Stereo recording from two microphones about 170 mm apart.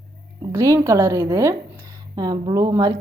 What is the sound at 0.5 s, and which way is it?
A woman's voice, 20° right (ahead or behind).